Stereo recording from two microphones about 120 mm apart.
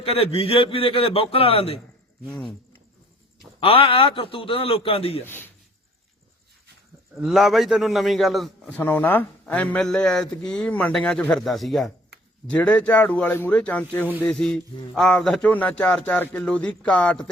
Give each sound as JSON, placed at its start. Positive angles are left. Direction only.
{"t": 0.0, "sound": "a man's voice", "side_deg": 50}
{"t": 2.3, "sound": "a man's voice", "side_deg": 0}
{"t": 3.6, "sound": "a man's voice", "side_deg": 50}
{"t": 5.2, "sound": "a man's voice", "side_deg": 20}
{"t": 7.2, "sound": "a man's voice", "side_deg": 0}
{"t": 8.8, "sound": "a man's voice", "side_deg": 15}